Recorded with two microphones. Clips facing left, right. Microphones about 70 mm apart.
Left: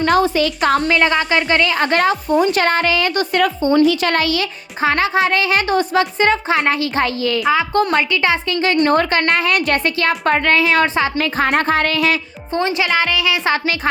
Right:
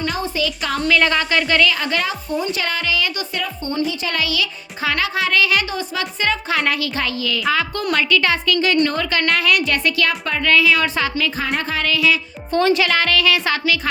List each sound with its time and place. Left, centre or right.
0.3 s speech: left
0.9 s a woman's voice: left
1.8 s speech: left
3.4 s a woman's voice: left
4.2 s a woman's voice: left
5.6 s a woman's voice: left
8.7 s a woman's voice: left
11.2 s speech: left
12.5 s a woman's voice: left